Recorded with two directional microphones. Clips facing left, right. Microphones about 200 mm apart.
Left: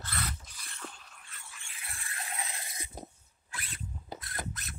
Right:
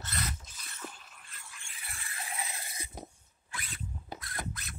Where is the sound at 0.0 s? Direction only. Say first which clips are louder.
Even; 20° right (ahead or behind).